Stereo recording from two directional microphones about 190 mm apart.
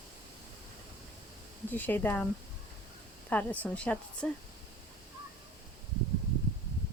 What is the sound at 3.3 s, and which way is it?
Speech, 10° left (ahead or behind).